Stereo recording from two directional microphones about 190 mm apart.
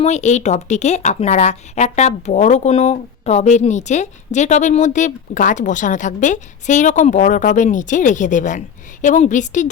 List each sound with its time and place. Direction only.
0.0 s a woman's voice: 35° left (ahead or behind)